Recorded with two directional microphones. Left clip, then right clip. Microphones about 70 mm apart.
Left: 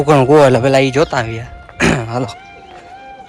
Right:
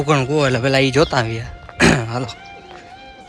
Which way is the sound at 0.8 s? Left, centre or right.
Right.